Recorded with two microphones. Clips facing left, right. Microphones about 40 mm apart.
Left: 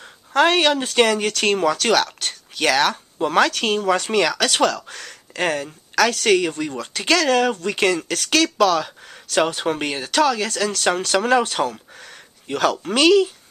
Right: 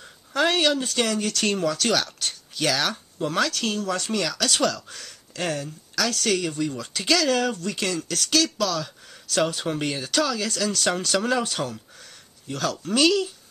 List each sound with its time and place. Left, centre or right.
0.4 s speech: left
7.7 s speech: left